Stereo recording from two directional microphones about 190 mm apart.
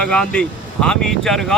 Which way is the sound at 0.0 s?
5° left (ahead or behind).